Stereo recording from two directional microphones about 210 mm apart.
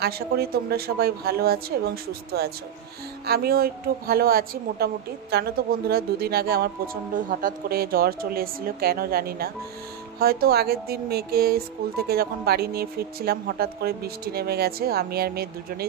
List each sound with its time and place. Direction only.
0.0 s a woman's voice: 50° right (ahead or behind)